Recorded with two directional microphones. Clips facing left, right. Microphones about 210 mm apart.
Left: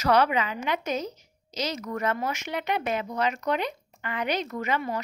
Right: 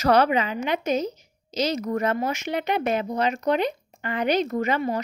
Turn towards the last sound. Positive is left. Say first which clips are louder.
# right 5 dB
turn(degrees=-30)  # may be behind; listen again after turning